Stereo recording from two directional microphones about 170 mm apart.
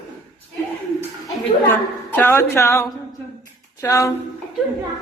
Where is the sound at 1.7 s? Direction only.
10° left (ahead or behind).